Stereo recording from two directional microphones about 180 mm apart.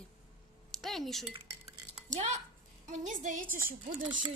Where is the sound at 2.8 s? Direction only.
45° right (ahead or behind).